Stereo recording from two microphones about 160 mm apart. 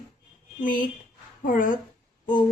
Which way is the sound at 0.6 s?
55° left (ahead or behind).